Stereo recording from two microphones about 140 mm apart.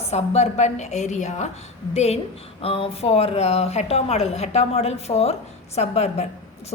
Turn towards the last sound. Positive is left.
turn(degrees=50)  # may be behind; listen again after turning